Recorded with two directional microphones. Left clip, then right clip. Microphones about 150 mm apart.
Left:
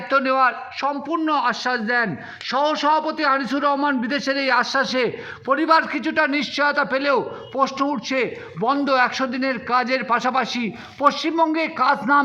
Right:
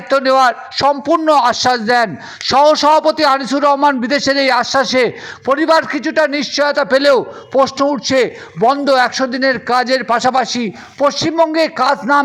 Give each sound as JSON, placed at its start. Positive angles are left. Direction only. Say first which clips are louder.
{"t": 0.1, "sound": "a man's voice", "louder": "right 7 dB", "side_deg": -35}